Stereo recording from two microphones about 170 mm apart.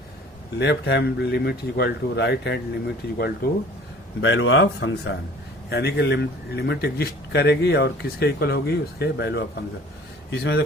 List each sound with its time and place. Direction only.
0.6 s speech: 90° left; by 3.5 s 65° left (ahead or behind)
4.2 s speech: 90° left
5.6 s speech: 75° left (ahead or behind)